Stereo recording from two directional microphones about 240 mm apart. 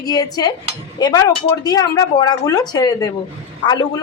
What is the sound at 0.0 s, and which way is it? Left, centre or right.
A woman's voice, centre.